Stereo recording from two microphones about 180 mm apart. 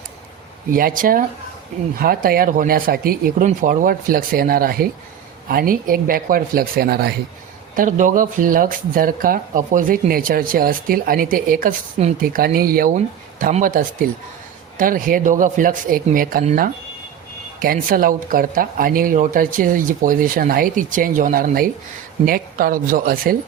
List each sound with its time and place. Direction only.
0.7 s speech: 50° right (ahead or behind)
7.8 s speech: 45° right (ahead or behind)
17.6 s speech: 50° right (ahead or behind)